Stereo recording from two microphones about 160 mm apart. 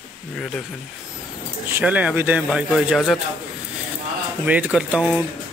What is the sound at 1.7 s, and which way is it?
Speech, 10° right (ahead or behind).